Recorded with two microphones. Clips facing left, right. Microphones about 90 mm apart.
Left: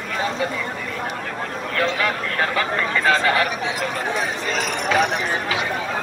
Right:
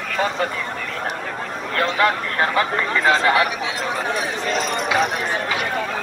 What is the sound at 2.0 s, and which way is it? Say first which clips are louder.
Speech: right 3 dB; 25° right (ahead or behind).